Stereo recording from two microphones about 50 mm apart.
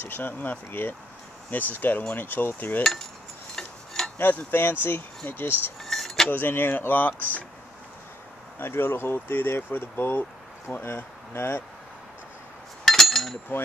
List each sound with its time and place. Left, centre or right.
0.0 s speech: left
2.8 s cutlery: centre
3.5 s a sound: centre
4.2 s speech: left
5.8 s keys jangling: centre
6.3 s speech: left
8.5 s speech: left
12.8 s a sound: centre